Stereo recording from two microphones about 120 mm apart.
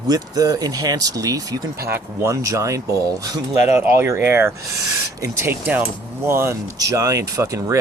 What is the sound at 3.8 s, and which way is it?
Speech, 15° right (ahead or behind).